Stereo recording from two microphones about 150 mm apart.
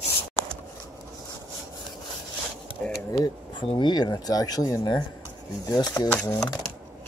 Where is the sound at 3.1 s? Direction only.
35° left (ahead or behind).